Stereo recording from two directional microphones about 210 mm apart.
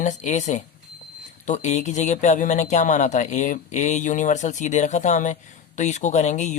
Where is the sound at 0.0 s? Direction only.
35° left (ahead or behind).